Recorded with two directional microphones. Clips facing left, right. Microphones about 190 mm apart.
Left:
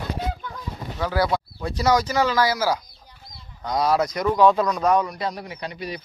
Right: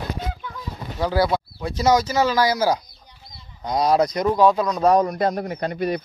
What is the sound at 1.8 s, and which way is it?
Speech, 25° right (ahead or behind).